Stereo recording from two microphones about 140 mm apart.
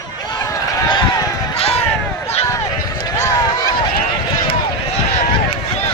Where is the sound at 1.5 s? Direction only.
45° left (ahead or behind).